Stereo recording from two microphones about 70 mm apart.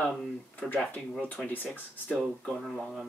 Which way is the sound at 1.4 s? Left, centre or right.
Centre.